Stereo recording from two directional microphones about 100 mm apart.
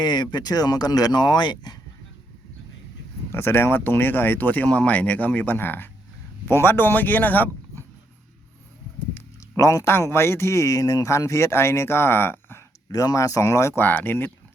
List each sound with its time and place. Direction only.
0.0 s speech: 45° left (ahead or behind)
3.3 s speech: 25° left (ahead or behind)
9.6 s speech: 35° left (ahead or behind)
12.9 s speech: 35° left (ahead or behind)